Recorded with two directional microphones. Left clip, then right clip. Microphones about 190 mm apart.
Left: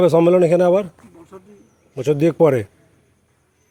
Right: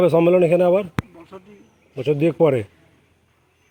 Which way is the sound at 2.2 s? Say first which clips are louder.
Left 2 dB; 20° left (ahead or behind).